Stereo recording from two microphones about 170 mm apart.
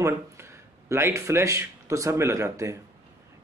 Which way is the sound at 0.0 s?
15° right (ahead or behind).